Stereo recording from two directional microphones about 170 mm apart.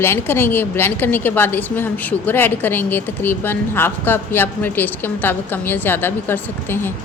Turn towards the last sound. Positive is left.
turn(degrees=15)  # may be behind; listen again after turning